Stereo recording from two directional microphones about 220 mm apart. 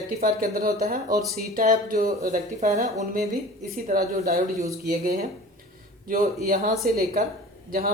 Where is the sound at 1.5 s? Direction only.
40° right (ahead or behind).